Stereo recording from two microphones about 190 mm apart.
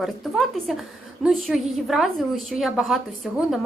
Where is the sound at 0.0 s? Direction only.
Centre (ahead or behind).